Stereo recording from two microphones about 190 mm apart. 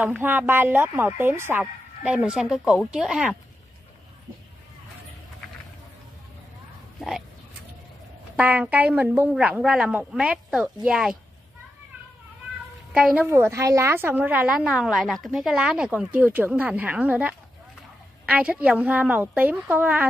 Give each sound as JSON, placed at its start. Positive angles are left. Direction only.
{"t": 0.2, "sound": "speech", "side_deg": -10}
{"t": 7.0, "sound": "a sound", "side_deg": 0}
{"t": 8.4, "sound": "a woman's voice", "side_deg": -10}
{"t": 12.9, "sound": "a woman's voice", "side_deg": -5}